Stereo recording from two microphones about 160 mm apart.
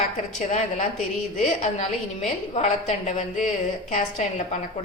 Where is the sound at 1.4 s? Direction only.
50° left (ahead or behind).